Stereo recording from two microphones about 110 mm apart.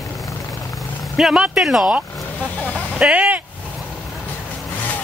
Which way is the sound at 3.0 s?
10° right (ahead or behind).